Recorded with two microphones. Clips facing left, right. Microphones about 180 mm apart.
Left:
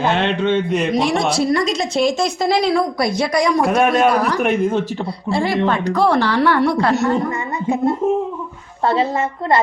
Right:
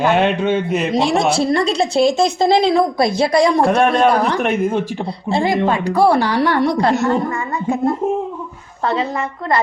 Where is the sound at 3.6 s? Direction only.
5° left (ahead or behind).